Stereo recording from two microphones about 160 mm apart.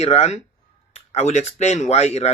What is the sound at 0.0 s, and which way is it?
Speech, 40° left (ahead or behind).